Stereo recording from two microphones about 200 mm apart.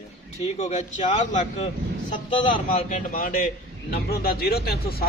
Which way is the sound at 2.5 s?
40° left (ahead or behind).